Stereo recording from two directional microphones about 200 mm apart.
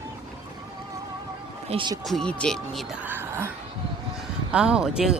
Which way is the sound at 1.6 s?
25° right (ahead or behind).